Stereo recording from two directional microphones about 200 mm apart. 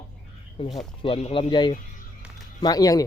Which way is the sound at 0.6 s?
30° left (ahead or behind).